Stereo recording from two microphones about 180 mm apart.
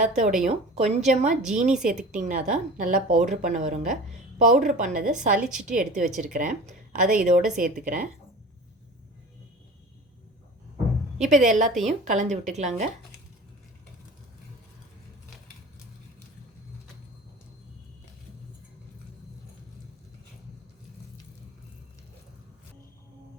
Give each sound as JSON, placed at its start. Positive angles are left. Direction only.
{"t": 0.0, "sound": "a woman's voice", "side_deg": -45}
{"t": 5.4, "sound": "a woman's voice", "side_deg": -5}
{"t": 5.6, "sound": "a woman's voice", "side_deg": -45}
{"t": 11.3, "sound": "a woman's voice", "side_deg": -40}